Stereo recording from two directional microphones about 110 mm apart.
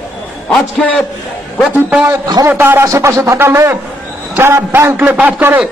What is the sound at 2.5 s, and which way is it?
A man's voice, 20° right (ahead or behind).